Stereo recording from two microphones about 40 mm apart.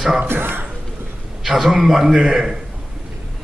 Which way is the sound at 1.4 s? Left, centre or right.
Centre.